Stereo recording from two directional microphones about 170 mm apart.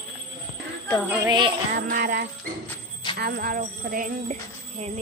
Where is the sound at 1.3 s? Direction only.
25° right (ahead or behind).